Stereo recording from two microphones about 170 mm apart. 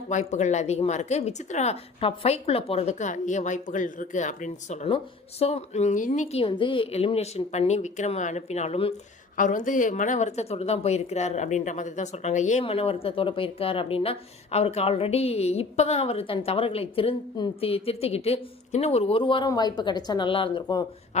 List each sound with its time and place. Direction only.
0.1 s speech: 45° left (ahead or behind)
6.4 s speech: 30° left (ahead or behind)
9.4 s speech: 50° left (ahead or behind); by 20.8 s 25° left (ahead or behind)